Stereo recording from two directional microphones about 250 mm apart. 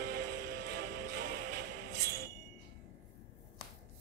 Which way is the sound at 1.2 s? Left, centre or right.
Right.